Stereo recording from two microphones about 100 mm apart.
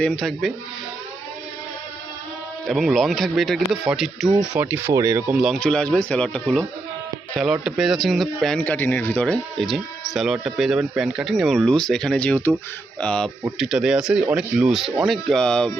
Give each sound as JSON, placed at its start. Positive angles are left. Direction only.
{"t": 0.0, "sound": "speech", "side_deg": 10}
{"t": 2.6, "sound": "speech", "side_deg": 0}
{"t": 4.6, "sound": "speech", "side_deg": -25}
{"t": 5.5, "sound": "speech", "side_deg": 10}
{"t": 7.3, "sound": "speech", "side_deg": -5}
{"t": 8.6, "sound": "speech", "side_deg": 15}
{"t": 9.6, "sound": "speech", "side_deg": 0}
{"t": 13.6, "sound": "speech", "side_deg": -5}